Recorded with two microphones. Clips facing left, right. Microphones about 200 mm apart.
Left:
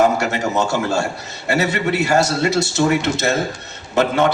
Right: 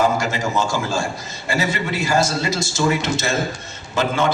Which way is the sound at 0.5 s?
65° left (ahead or behind).